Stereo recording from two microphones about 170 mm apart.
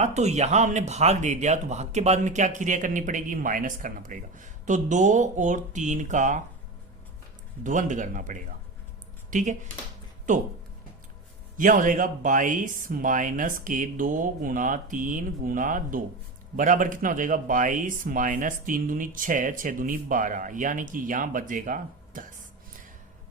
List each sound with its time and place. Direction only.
0.0 s speech: 40° right (ahead or behind)
7.6 s speech: 50° right (ahead or behind)
11.5 s speech: 50° right (ahead or behind)